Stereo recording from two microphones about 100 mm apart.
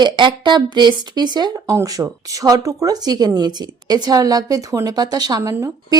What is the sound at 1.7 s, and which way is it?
A woman's voice, 35° right (ahead or behind).